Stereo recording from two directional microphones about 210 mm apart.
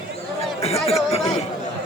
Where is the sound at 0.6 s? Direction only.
30° left (ahead or behind).